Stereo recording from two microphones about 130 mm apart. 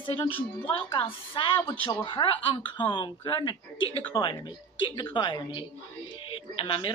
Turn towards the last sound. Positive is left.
turn(degrees=40)  # may be behind; listen again after turning